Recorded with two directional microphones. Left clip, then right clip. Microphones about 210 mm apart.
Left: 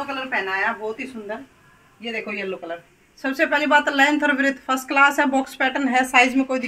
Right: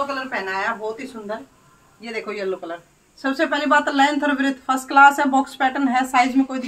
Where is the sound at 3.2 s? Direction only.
15° left (ahead or behind).